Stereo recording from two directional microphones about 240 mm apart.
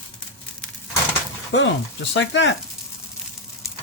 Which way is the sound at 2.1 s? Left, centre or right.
Left.